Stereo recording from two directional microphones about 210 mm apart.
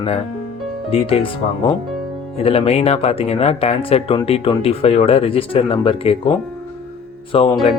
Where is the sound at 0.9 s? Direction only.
25° left (ahead or behind).